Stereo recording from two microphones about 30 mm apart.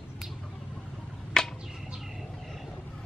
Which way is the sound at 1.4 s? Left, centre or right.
Centre.